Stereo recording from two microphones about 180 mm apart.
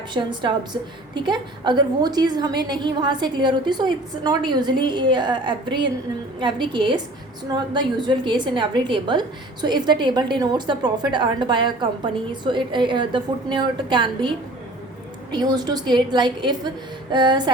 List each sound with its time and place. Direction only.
0.1 s a woman's voice: 25° right (ahead or behind)